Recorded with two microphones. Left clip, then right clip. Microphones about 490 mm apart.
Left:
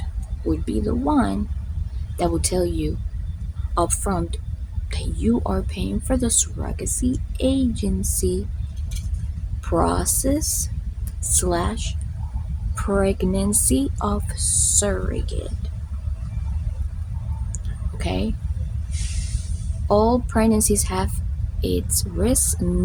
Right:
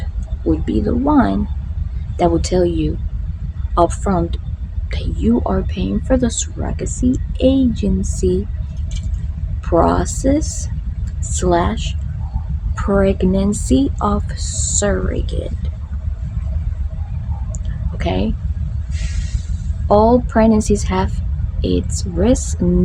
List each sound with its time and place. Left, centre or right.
0.6 s a woman's voice: left
9.6 s a woman's voice: left
18.0 s speech: left
19.9 s a woman's voice: left